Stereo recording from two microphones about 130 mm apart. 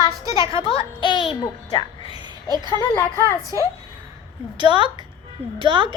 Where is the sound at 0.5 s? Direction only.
45° left (ahead or behind).